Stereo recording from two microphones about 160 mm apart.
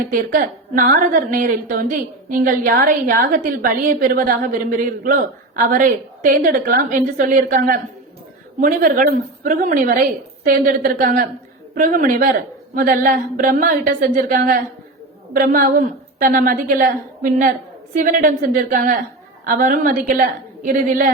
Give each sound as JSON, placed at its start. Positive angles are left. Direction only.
{"t": 0.1, "sound": "a woman's voice", "side_deg": -55}